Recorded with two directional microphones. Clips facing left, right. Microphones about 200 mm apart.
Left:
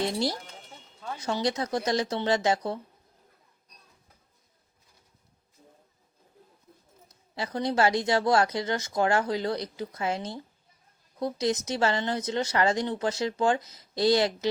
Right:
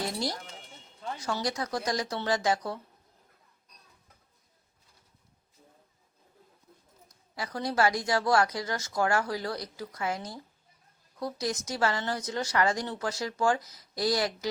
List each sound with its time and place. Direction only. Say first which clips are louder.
0.0 s music: left 5 dB; 25° left (ahead or behind)
1.2 s speech: left 4 dB; 25° left (ahead or behind)
7.3 s speech: left 3 dB; 25° left (ahead or behind)